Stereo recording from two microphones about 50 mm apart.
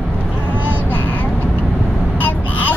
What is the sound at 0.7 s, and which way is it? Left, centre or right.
Vehicle, left.